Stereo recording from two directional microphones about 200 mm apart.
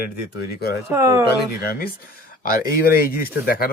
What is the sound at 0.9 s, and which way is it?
Speech, 15° right (ahead or behind).